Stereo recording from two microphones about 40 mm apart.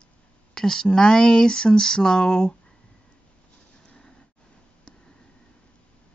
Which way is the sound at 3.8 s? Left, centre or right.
Left.